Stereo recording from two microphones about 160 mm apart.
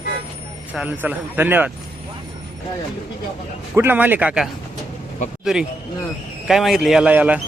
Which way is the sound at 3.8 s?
10° right (ahead or behind).